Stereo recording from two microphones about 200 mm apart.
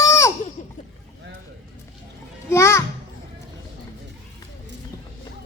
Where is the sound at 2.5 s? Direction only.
15° left (ahead or behind).